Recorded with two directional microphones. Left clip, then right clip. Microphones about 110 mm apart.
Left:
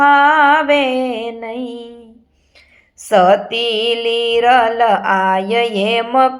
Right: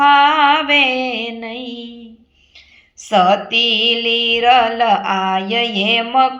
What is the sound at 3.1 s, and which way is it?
Speech, 60° left (ahead or behind).